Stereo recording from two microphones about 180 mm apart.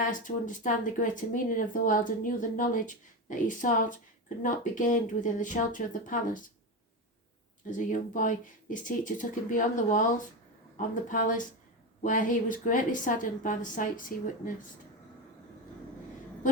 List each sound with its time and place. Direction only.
0.0 s speech: 45° left (ahead or behind)
7.8 s speech: 45° left (ahead or behind)